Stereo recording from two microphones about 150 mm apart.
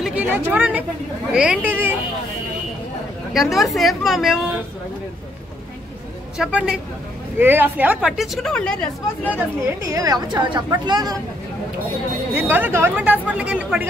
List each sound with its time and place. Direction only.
0.0 s speech: 10° right (ahead or behind)
3.3 s a woman's voice: centre (ahead or behind)
6.3 s a woman's voice: 5° right (ahead or behind)
9.8 s a woman's voice: 20° right (ahead or behind)
12.4 s speech: 15° right (ahead or behind)